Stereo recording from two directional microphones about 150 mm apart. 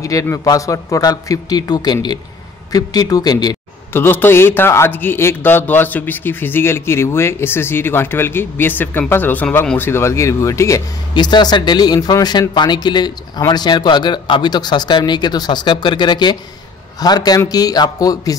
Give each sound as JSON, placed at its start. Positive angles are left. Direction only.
{"t": 0.0, "sound": "a man's voice", "side_deg": 20}
{"t": 3.9, "sound": "a man's voice", "side_deg": 15}